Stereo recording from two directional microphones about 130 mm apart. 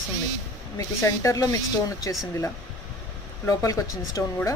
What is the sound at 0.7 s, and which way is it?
Speech, 25° left (ahead or behind).